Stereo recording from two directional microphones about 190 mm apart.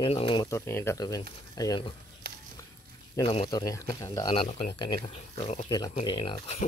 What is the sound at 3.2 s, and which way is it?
Speech, 25° left (ahead or behind).